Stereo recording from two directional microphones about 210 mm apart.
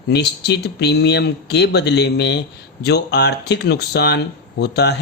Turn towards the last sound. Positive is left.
turn(degrees=50)  # may be behind; listen again after turning